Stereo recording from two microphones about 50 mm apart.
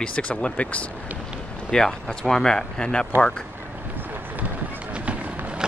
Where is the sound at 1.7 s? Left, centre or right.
Centre.